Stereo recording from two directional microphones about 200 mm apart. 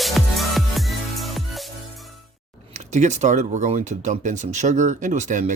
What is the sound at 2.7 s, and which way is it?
Speech, 35° right (ahead or behind).